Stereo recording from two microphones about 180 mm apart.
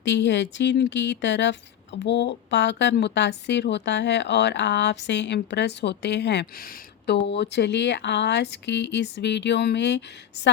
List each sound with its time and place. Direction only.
0.0 s speech: 80° left